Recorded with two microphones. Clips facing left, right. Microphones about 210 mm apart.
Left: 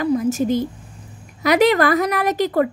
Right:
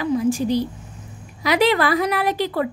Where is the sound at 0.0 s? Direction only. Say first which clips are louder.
Left 1 dB; 45° left (ahead or behind).